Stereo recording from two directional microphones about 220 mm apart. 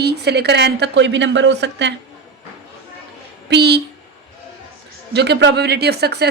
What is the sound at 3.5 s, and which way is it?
Speech, 50° right (ahead or behind).